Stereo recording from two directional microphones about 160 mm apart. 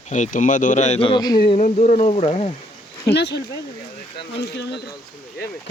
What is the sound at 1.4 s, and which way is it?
Speech, 45° left (ahead or behind).